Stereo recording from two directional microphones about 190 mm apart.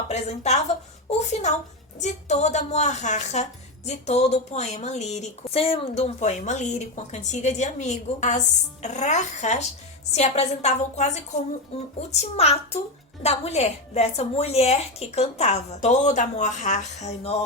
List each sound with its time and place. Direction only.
0.1 s speech: 35° left (ahead or behind)